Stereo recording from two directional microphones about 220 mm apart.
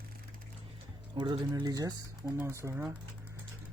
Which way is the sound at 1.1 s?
20° right (ahead or behind).